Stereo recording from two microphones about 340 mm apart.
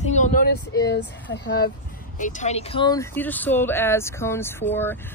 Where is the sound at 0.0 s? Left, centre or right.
Left.